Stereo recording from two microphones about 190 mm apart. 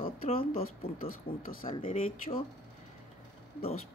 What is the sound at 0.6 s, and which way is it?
Speech, 50° left (ahead or behind).